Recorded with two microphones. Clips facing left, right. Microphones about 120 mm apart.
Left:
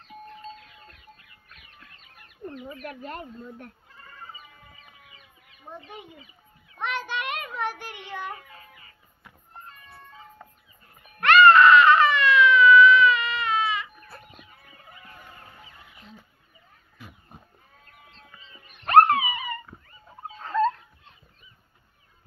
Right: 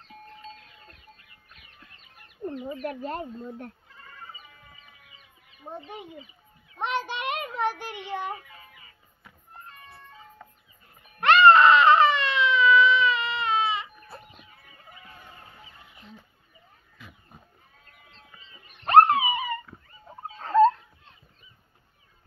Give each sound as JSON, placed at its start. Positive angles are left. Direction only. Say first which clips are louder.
{"t": 1.5, "sound": "chicken", "louder": "left 2 dB", "side_deg": -25}
{"t": 5.7, "sound": "a child's voice", "louder": "right 3 dB", "side_deg": -30}
{"t": 11.1, "sound": "baby cry", "louder": "left 1 dB", "side_deg": -25}
{"t": 15.6, "sound": "fowl", "louder": "left 1 dB", "side_deg": -25}
{"t": 18.1, "sound": "wail", "louder": "even", "side_deg": -25}
{"t": 20.3, "sound": "a sound", "louder": "right 5 dB", "side_deg": -30}